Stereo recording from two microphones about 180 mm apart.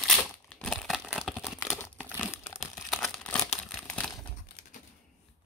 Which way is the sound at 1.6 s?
15° left (ahead or behind).